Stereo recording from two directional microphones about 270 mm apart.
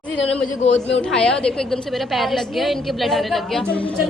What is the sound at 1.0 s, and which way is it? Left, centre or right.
A woman's voice, centre.